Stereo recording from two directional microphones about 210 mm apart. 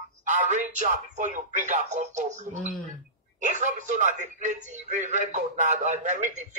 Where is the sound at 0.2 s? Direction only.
35° right (ahead or behind).